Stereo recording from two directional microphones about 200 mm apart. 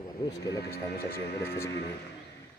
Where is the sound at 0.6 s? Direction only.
50° left (ahead or behind).